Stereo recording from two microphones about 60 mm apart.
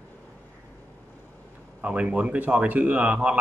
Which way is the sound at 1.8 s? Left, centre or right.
Centre.